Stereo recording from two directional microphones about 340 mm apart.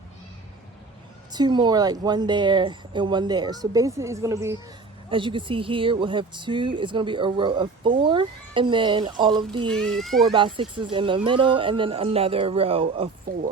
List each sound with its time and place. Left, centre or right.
1.3 s speech: centre
9.6 s speech: centre
10.3 s speech: centre